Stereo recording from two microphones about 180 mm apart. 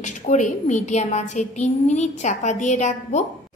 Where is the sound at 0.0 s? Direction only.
40° left (ahead or behind).